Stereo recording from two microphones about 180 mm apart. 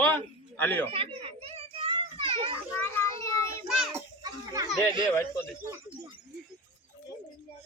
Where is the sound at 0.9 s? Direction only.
30° right (ahead or behind).